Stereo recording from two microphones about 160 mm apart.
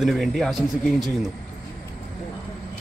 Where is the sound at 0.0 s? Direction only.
Centre (ahead or behind).